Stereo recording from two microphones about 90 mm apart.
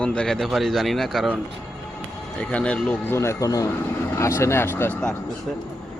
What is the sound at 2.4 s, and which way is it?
Speech, 15° left (ahead or behind).